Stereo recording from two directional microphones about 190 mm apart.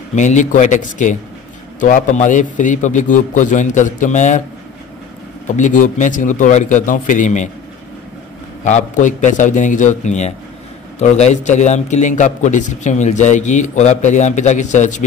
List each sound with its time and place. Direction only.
0.1 s a man's voice: 40° left (ahead or behind)
5.5 s a man's voice: 40° left (ahead or behind)
8.6 s a man's voice: 40° left (ahead or behind)